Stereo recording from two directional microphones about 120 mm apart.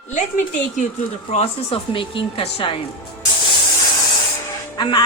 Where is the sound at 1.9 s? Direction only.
45° left (ahead or behind).